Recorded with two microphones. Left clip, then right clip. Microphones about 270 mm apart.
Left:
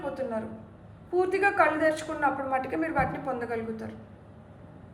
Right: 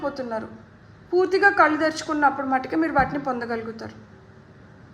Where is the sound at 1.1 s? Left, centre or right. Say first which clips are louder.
Right 7 dB; centre.